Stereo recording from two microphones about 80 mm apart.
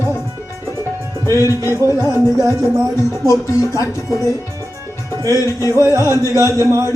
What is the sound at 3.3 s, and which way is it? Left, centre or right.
Speech, left.